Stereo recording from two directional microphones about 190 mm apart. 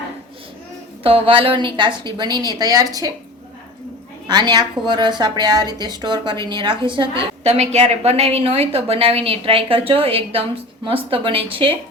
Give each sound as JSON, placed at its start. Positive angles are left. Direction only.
{"t": 1.0, "sound": "a woman's voice", "side_deg": -30}
{"t": 4.3, "sound": "a woman's voice", "side_deg": -20}